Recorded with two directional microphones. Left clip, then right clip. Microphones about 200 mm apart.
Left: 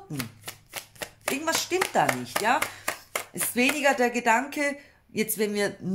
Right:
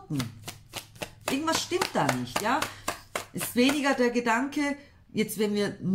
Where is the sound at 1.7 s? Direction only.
35° left (ahead or behind).